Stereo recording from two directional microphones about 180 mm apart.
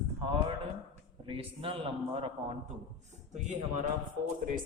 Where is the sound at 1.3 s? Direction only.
30° right (ahead or behind).